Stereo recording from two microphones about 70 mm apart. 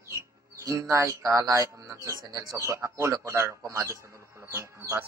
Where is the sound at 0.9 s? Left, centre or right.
Right.